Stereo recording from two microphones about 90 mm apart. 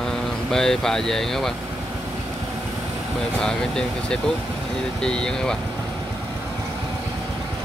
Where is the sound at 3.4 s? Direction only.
5° left (ahead or behind).